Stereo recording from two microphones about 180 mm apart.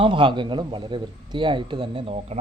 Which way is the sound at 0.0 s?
30° right (ahead or behind).